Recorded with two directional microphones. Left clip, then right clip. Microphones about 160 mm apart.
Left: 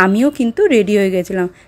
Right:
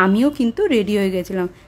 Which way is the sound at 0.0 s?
25° left (ahead or behind).